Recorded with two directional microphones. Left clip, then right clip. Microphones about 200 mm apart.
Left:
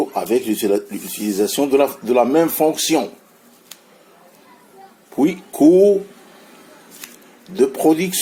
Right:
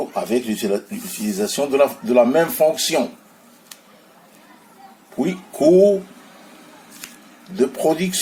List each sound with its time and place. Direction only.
0.1 s speech: 40° left (ahead or behind)
5.2 s speech: 40° left (ahead or behind)
7.0 s a sound: 25° left (ahead or behind)
7.5 s speech: 40° left (ahead or behind)